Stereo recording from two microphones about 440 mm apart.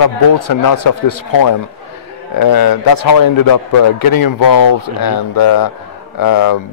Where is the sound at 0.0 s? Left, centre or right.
Left.